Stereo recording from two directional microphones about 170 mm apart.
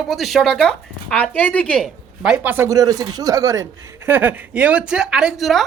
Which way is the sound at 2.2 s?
5° right (ahead or behind).